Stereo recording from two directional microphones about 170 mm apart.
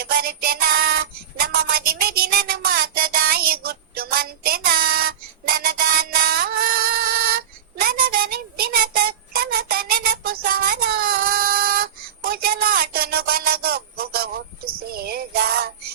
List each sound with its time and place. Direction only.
0.0 s music: 65° right (ahead or behind)
7.8 s child singing: 65° right (ahead or behind)